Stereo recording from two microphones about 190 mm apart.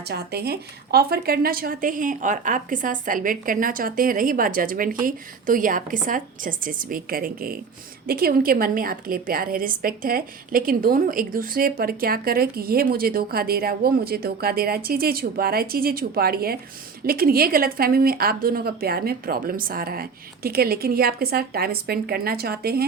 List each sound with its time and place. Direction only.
0.1 s a woman's voice: 55° right (ahead or behind)